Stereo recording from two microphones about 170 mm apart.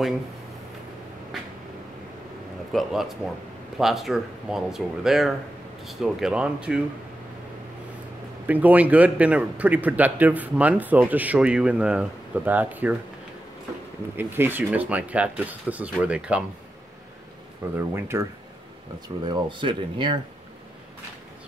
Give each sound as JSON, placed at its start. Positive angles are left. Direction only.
{"t": 2.7, "sound": "speech", "side_deg": 0}
{"t": 8.5, "sound": "speech", "side_deg": -10}
{"t": 14.1, "sound": "speech", "side_deg": -15}
{"t": 17.9, "sound": "speech", "side_deg": -15}
{"t": 19.2, "sound": "speech", "side_deg": -25}